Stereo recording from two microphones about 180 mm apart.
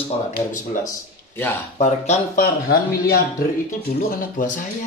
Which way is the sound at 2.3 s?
55° left (ahead or behind).